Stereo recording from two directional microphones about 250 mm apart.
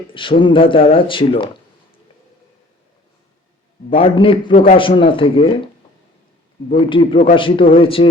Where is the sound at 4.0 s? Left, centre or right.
Left.